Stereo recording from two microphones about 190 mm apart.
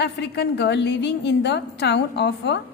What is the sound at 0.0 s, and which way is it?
A woman's voice, 65° left (ahead or behind).